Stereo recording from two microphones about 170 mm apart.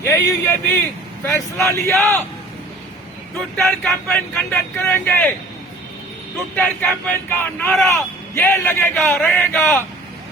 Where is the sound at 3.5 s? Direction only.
Centre (ahead or behind).